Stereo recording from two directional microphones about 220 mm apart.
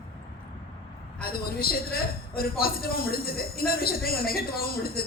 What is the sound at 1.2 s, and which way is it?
A woman's voice, 45° left (ahead or behind).